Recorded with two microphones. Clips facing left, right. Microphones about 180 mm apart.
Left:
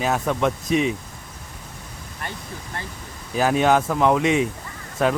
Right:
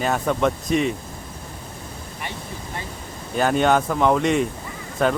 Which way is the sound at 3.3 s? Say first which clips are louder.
Even; centre (ahead or behind).